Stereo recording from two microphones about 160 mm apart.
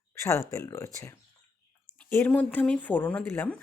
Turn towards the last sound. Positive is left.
turn(degrees=10)  # may be behind; listen again after turning